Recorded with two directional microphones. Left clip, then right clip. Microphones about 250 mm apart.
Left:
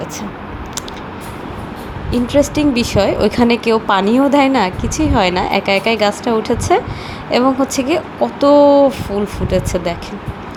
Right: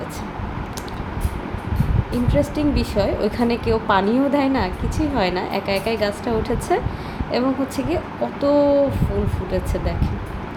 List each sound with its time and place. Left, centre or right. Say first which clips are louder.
2.2 s speech: left 7 dB; centre